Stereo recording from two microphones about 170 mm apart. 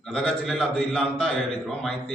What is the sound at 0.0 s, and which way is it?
A man's voice, 5° left (ahead or behind).